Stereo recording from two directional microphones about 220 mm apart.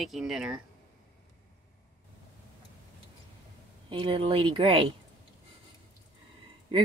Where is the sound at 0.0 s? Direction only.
Centre (ahead or behind).